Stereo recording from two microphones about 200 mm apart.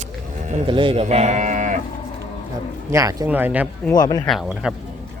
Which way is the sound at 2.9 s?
15° right (ahead or behind).